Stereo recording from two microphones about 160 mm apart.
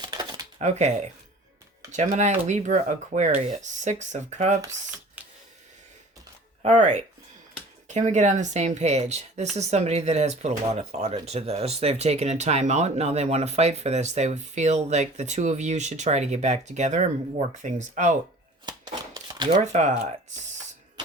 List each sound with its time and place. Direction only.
0.0 s shuffling cards: 25° right (ahead or behind)
0.6 s speech: 45° right (ahead or behind)
5.2 s camera: 10° right (ahead or behind)
6.6 s speech: 50° right (ahead or behind)
19.1 s a sound: 25° right (ahead or behind)